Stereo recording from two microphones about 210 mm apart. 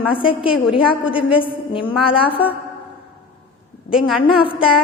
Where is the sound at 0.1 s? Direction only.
25° left (ahead or behind).